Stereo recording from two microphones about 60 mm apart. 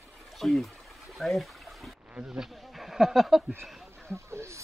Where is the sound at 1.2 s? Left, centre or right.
Centre.